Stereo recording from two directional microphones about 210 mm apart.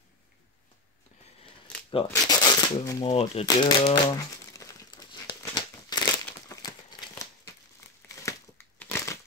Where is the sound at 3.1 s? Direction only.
25° left (ahead or behind).